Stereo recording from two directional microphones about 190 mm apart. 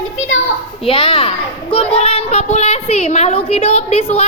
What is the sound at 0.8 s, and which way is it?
A child's voice, 30° left (ahead or behind).